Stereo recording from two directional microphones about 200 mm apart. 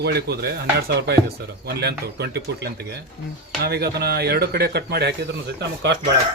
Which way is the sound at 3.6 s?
55° right (ahead or behind).